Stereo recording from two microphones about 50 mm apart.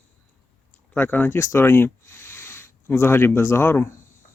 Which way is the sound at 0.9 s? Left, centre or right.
Left.